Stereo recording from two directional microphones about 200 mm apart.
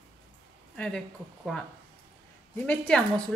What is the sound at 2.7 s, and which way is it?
Speech, 5° left (ahead or behind).